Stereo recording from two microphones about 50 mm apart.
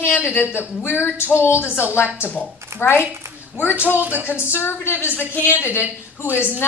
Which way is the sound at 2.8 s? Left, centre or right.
Left.